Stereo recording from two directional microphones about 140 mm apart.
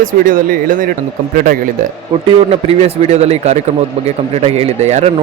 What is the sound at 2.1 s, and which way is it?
A man's voice, 40° right (ahead or behind).